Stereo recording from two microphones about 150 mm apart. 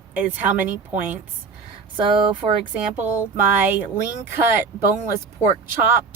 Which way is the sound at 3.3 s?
10° right (ahead or behind).